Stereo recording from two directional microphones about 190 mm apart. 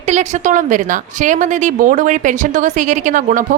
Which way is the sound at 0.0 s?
40° right (ahead or behind).